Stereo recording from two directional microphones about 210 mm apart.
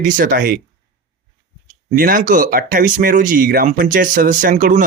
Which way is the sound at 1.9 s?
45° right (ahead or behind).